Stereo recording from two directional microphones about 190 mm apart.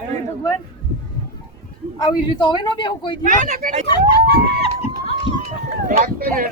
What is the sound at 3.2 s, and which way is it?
Speech, 40° right (ahead or behind).